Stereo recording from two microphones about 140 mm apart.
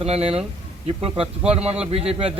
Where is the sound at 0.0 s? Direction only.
45° right (ahead or behind).